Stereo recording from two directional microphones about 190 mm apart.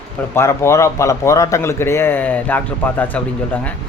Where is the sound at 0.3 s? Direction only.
15° left (ahead or behind).